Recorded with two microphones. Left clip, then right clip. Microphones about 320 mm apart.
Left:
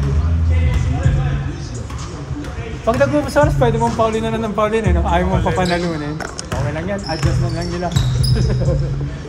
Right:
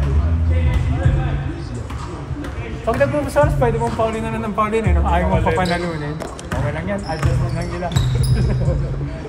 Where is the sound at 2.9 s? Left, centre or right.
Left.